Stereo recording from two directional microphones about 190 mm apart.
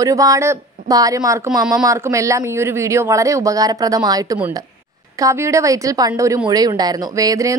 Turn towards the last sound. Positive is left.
turn(degrees=-15)  # may be behind; listen again after turning